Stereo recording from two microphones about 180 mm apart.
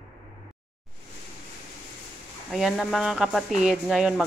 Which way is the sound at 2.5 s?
Centre (ahead or behind).